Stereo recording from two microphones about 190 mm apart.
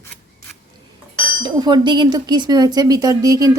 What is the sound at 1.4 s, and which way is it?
A woman's voice, 20° right (ahead or behind).